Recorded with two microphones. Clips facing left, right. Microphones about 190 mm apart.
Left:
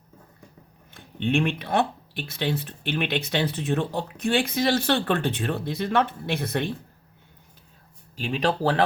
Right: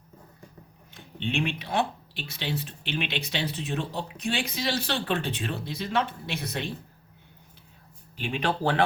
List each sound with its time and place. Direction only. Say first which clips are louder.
0.9 s speech: left 6 dB; 55° left (ahead or behind)
8.2 s speech: left 3 dB; 35° left (ahead or behind)